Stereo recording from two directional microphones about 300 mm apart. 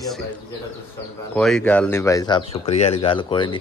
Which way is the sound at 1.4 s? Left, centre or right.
Centre.